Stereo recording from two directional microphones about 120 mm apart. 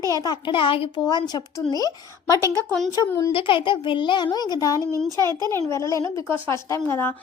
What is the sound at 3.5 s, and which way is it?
A woman's voice, 45° left (ahead or behind).